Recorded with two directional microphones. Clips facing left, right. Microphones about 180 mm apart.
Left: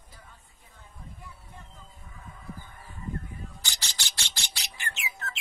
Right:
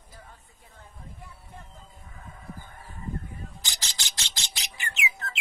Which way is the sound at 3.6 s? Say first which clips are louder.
Even; 15° right (ahead or behind).